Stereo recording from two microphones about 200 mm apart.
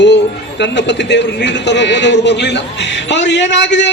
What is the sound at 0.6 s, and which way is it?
A man's voice, 60° left (ahead or behind).